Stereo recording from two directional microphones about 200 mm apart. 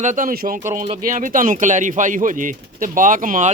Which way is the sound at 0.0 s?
40° right (ahead or behind).